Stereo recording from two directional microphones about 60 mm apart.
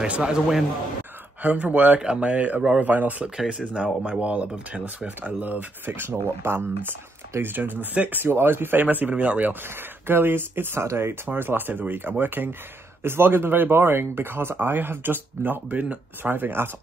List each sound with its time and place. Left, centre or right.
0.0 s a man's voice: centre
1.4 s speech: right
3.3 s speech: centre; by 8.8 s right
8.8 s speech: right
9.5 s speech: right
11.2 s speech: right